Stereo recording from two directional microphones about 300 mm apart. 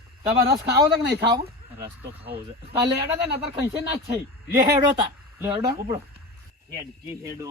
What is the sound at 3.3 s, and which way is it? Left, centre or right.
Speech, centre.